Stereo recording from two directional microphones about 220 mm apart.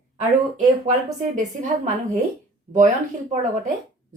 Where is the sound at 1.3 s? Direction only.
30° right (ahead or behind).